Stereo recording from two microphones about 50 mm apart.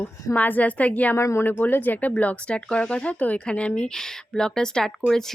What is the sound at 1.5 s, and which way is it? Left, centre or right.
Speech, left.